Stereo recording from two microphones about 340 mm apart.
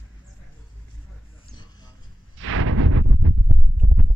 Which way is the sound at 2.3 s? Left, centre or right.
Right.